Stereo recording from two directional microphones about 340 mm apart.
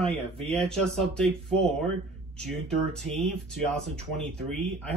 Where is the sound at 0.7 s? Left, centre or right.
Centre.